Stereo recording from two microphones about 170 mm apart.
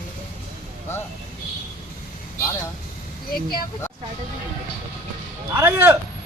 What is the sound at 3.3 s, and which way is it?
Speech, 65° left (ahead or behind).